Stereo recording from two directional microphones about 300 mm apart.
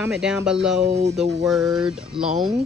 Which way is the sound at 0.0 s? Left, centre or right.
Centre.